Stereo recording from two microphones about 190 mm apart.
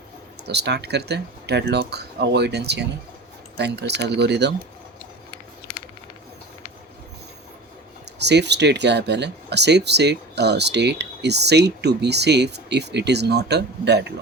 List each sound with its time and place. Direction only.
0.4 s speech: 60° right (ahead or behind)
8.2 s speech: 65° right (ahead or behind)